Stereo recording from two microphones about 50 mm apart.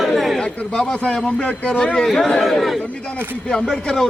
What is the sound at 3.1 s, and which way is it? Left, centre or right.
Speech, right.